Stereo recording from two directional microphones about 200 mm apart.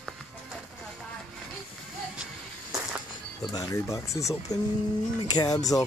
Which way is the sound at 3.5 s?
15° left (ahead or behind).